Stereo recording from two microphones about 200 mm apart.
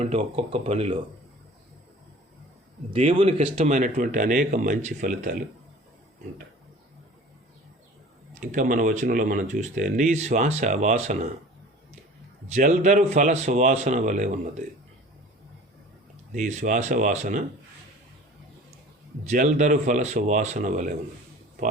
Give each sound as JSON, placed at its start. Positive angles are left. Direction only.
{"t": 0.0, "sound": "speech", "side_deg": -30}
{"t": 2.9, "sound": "speech", "side_deg": -30}
{"t": 8.4, "sound": "speech", "side_deg": -40}
{"t": 12.5, "sound": "speech", "side_deg": -35}
{"t": 16.3, "sound": "speech", "side_deg": -35}
{"t": 19.3, "sound": "speech", "side_deg": -35}